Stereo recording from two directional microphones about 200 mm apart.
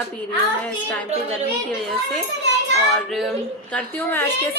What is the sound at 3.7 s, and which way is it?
Speech, 10° left (ahead or behind).